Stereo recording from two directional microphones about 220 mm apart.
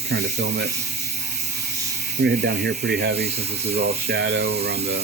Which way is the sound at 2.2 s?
50° right (ahead or behind).